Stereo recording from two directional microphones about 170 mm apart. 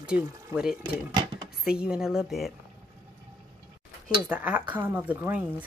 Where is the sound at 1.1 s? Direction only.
25° right (ahead or behind).